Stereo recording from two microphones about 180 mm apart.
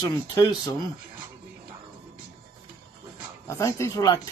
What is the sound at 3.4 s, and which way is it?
Speech, 15° left (ahead or behind).